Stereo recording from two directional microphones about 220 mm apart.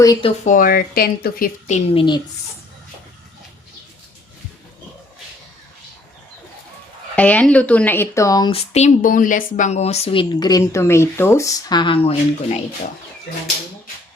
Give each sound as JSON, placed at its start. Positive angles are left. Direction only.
{"t": 0.0, "sound": "speech", "side_deg": 20}
{"t": 7.2, "sound": "a woman's voice", "side_deg": 5}